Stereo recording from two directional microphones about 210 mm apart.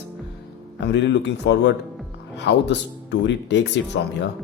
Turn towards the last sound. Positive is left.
turn(degrees=55)  # may be behind; listen again after turning